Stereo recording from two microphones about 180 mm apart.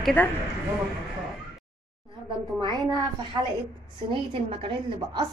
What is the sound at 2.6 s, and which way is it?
A woman's voice, 25° right (ahead or behind).